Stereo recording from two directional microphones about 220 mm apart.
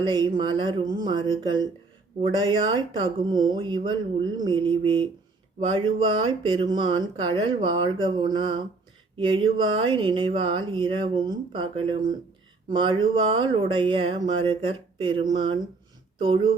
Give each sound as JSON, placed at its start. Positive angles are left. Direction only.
{"t": 0.0, "sound": "speech", "side_deg": -20}